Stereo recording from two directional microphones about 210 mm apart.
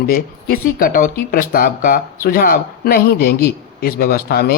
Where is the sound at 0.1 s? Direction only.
45° left (ahead or behind).